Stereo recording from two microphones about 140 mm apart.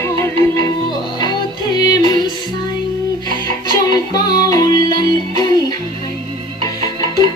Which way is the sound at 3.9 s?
30° left (ahead or behind).